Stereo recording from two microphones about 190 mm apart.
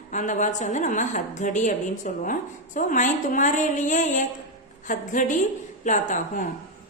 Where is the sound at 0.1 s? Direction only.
40° left (ahead or behind).